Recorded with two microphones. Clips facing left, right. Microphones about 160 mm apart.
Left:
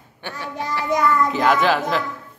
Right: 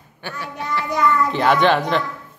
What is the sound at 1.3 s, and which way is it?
Speech, centre (ahead or behind).